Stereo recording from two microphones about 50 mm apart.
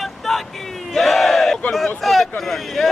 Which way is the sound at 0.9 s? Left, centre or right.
Centre.